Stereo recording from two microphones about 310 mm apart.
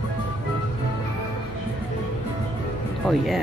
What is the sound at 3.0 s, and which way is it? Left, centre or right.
Speech, centre.